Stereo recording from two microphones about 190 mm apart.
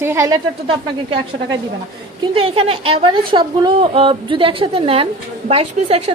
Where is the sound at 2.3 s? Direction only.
30° right (ahead or behind).